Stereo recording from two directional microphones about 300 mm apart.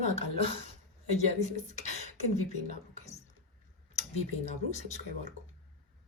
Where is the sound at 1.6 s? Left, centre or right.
Left.